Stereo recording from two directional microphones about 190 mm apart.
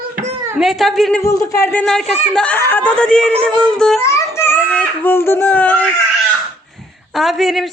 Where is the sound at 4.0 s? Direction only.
15° left (ahead or behind).